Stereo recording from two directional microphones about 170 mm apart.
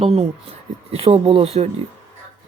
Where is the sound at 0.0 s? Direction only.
35° right (ahead or behind).